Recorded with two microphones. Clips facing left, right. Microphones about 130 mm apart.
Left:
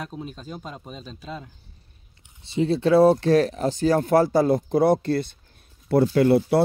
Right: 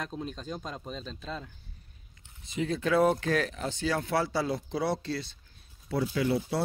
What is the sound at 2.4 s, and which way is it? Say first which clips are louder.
Speech: left 9 dB; 30° left (ahead or behind).